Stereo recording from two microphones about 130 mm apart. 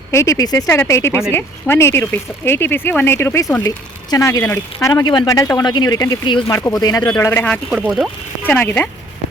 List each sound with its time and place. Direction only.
0.1 s speech: 25° left (ahead or behind)
7.7 s speech: 10° right (ahead or behind)
8.4 s speech: 15° left (ahead or behind)